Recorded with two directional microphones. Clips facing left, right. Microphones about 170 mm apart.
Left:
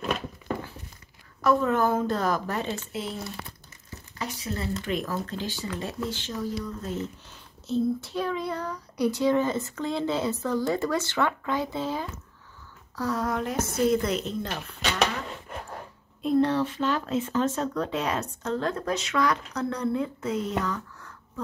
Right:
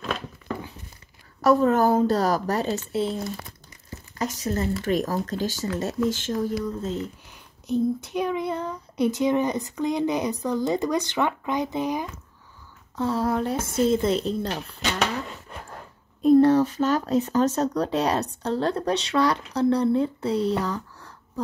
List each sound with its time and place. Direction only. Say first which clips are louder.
1.4 s speech: right 4 dB; 40° right (ahead or behind)
4.2 s speech: right 6 dB; 45° right (ahead or behind)
6.8 s child singing: right 3 dB; 20° right (ahead or behind)
12.9 s a woman's voice: right 4 dB; 25° right (ahead or behind)
16.2 s speech: right 7 dB; 45° right (ahead or behind)